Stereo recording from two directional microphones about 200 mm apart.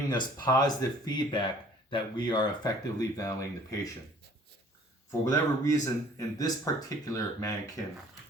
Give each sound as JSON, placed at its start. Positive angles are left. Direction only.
{"t": 0.1, "sound": "speech", "side_deg": 20}
{"t": 5.2, "sound": "speech", "side_deg": 15}